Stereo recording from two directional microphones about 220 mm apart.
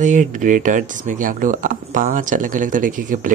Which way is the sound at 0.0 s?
35° right (ahead or behind).